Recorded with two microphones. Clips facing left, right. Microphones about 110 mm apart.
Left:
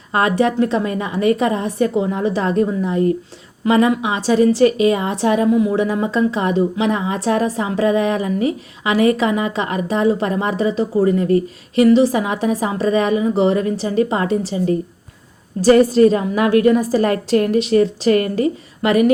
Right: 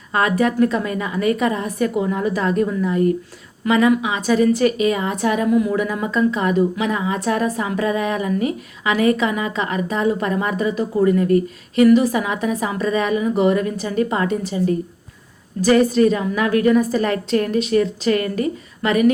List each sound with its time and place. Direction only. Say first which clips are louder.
0.1 s a woman's voice: left 2 dB; 30° left (ahead or behind)